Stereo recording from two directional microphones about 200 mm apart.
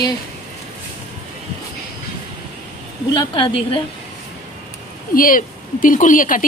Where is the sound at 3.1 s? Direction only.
25° left (ahead or behind).